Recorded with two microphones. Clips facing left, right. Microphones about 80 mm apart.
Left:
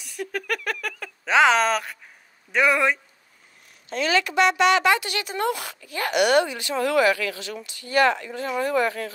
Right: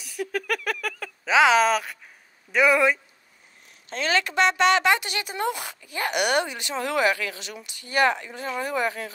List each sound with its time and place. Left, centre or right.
0.0 s a sound: centre
2.5 s speech: centre
3.9 s speech: right
5.1 s speech: centre